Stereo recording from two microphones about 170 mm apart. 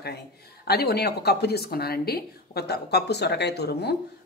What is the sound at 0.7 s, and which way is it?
Speech, 70° left (ahead or behind).